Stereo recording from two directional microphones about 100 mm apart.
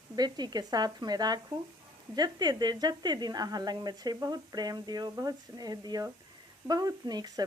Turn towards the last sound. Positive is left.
turn(degrees=-45)  # may be behind; listen again after turning